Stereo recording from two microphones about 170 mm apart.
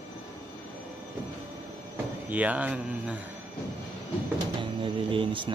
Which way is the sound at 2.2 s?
10° right (ahead or behind).